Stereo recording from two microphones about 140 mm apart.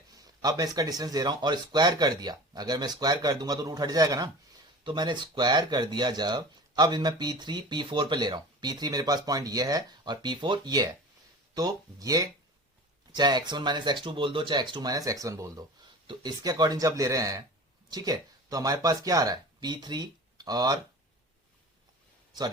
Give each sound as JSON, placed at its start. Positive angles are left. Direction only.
{"t": 0.1, "sound": "speech", "side_deg": -25}